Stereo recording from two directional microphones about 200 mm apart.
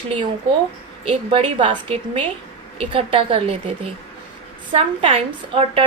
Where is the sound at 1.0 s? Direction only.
25° right (ahead or behind).